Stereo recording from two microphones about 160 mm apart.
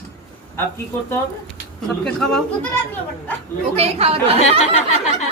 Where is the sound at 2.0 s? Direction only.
5° left (ahead or behind).